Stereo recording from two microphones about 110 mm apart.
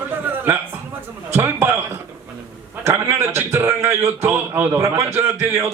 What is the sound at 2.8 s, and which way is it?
A man's voice, 20° right (ahead or behind).